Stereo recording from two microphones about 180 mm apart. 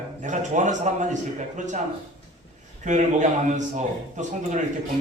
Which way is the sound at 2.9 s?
45° right (ahead or behind).